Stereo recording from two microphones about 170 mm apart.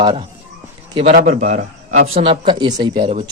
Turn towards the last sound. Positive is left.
turn(degrees=-25)  # may be behind; listen again after turning